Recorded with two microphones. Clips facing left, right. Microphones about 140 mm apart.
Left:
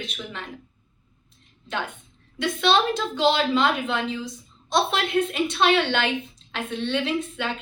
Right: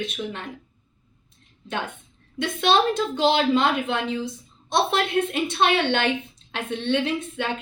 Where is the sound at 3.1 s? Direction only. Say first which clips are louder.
Even; 50° right (ahead or behind).